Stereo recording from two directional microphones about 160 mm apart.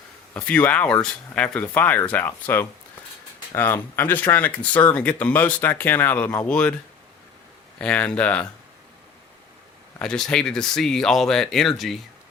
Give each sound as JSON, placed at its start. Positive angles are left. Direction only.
{"t": 0.3, "sound": "speech", "side_deg": 10}
{"t": 7.8, "sound": "speech", "side_deg": 10}
{"t": 10.0, "sound": "speech", "side_deg": 5}